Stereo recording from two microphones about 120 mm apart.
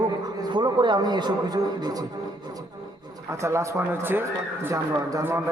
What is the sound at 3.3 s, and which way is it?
A man's voice, 25° right (ahead or behind).